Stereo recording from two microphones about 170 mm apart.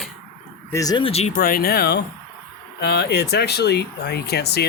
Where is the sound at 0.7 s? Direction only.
25° left (ahead or behind).